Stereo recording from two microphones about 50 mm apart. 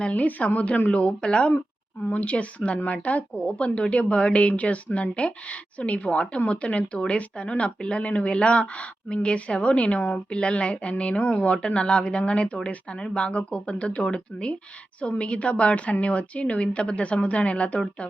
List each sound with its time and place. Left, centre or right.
0.0 s speech: left